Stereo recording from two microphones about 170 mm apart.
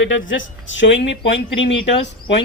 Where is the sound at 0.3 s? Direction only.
90° left.